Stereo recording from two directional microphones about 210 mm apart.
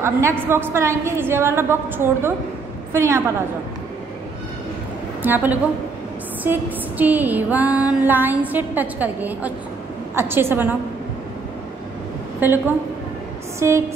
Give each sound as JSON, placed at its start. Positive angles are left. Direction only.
{"t": 0.0, "sound": "music", "side_deg": -10}
{"t": 2.9, "sound": "a woman's voice", "side_deg": -10}
{"t": 5.2, "sound": "music", "side_deg": -10}
{"t": 12.4, "sound": "music", "side_deg": -10}
{"t": 13.6, "sound": "a sound", "side_deg": -15}